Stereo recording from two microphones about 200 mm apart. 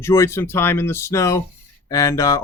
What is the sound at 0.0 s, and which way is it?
Speech, 15° left (ahead or behind).